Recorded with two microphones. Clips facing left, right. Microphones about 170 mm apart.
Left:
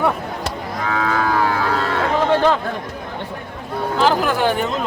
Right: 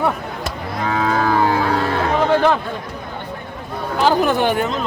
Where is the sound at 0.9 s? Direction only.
30° right (ahead or behind).